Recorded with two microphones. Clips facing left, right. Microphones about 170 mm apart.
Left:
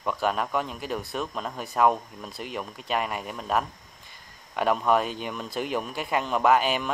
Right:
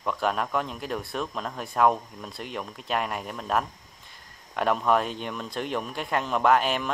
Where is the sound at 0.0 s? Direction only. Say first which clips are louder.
Even; centre (ahead or behind).